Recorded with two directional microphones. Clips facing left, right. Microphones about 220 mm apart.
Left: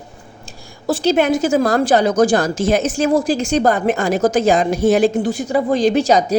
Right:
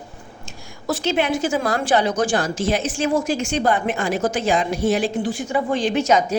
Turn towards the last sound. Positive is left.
turn(degrees=35)  # may be behind; listen again after turning